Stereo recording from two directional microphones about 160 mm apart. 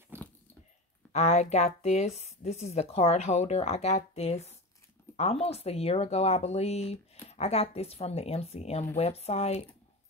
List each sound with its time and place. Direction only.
1.1 s speech: 45° left (ahead or behind)